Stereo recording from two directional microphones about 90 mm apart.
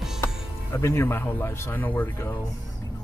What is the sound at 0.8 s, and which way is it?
Speech, 30° left (ahead or behind).